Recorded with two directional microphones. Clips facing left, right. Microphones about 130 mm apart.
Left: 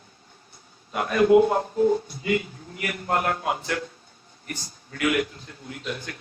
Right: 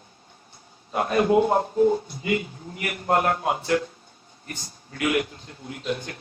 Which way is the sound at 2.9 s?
35° right (ahead or behind).